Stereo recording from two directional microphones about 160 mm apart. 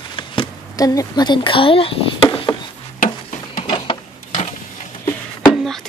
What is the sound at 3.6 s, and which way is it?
Printer, 30° left (ahead or behind).